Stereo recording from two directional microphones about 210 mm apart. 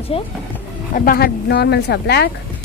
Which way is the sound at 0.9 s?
45° left (ahead or behind).